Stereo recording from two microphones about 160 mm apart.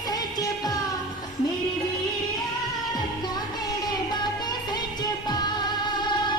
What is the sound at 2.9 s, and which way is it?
Music, 25° left (ahead or behind).